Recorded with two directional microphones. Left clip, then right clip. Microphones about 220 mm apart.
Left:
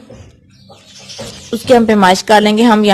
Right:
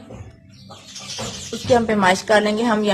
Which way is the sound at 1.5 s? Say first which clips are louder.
Left 8 dB; 45° left (ahead or behind).